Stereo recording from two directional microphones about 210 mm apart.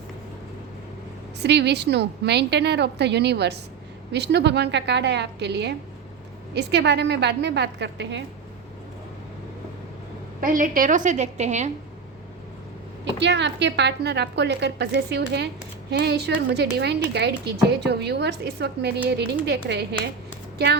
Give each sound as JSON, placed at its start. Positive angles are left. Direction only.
{"t": 1.4, "sound": "a woman's voice", "side_deg": -55}
{"t": 10.4, "sound": "a woman's voice", "side_deg": -40}
{"t": 13.1, "sound": "a woman's voice", "side_deg": -55}